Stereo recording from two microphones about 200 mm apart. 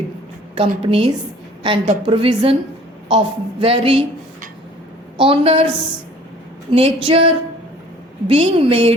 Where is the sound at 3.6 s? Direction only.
30° right (ahead or behind).